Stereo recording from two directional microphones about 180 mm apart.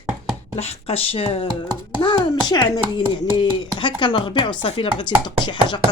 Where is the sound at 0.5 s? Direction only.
35° left (ahead or behind).